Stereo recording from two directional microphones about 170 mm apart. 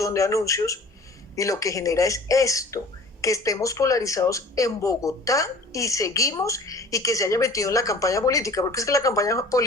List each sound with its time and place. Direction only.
0.0 s speech: 20° left (ahead or behind)